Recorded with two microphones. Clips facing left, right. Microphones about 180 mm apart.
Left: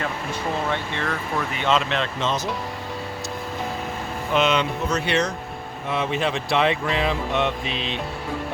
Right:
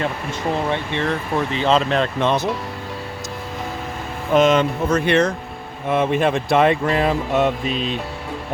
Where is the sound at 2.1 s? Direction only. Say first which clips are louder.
Right 6 dB; 60° right (ahead or behind).